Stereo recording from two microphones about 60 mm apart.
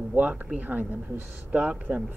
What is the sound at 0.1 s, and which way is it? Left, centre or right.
Speech, right.